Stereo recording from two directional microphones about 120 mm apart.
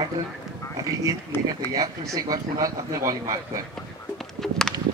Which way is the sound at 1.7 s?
30° right (ahead or behind).